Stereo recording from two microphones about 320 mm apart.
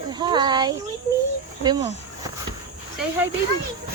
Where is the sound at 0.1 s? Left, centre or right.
Centre.